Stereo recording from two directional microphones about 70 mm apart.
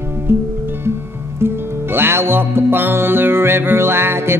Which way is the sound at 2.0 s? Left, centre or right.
Right.